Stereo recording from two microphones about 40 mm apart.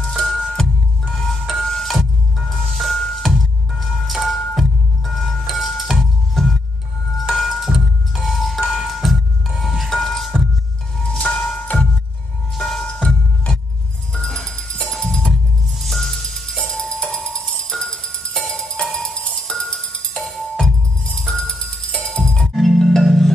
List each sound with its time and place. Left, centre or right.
0.0 s music: centre
1.1 s music: centre
2.0 s music: centre
14.1 s music: centre
15.8 s music: centre
21.5 s music: centre
22.5 s marimba: centre